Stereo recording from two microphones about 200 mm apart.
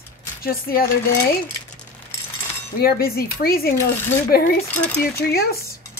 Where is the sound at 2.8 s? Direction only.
50° left (ahead or behind).